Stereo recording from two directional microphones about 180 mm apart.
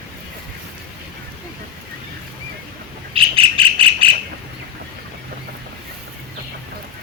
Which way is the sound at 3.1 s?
30° right (ahead or behind).